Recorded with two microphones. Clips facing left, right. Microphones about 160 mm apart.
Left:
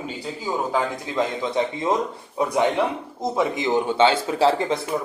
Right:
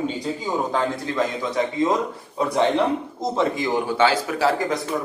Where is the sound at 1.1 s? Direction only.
20° left (ahead or behind).